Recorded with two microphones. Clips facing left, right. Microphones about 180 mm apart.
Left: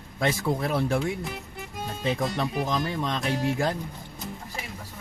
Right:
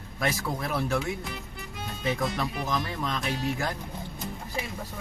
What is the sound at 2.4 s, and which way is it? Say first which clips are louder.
Speech: left 3 dB; 25° left (ahead or behind).